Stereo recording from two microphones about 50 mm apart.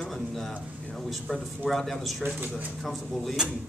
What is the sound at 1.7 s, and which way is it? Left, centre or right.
A man's voice, centre.